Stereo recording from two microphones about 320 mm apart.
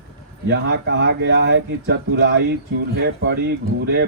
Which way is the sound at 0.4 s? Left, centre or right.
Right.